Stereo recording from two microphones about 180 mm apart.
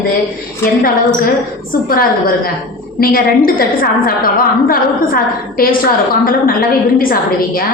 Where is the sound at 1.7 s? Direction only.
55° left (ahead or behind).